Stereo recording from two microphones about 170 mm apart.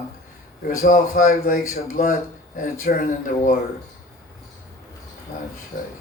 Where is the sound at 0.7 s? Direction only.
50° left (ahead or behind).